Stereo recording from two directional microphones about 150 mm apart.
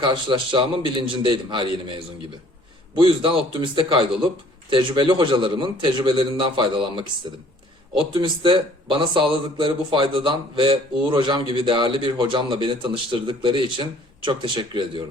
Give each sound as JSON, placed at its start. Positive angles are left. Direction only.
{"t": 0.0, "sound": "speech", "side_deg": -30}
{"t": 2.9, "sound": "speech", "side_deg": -35}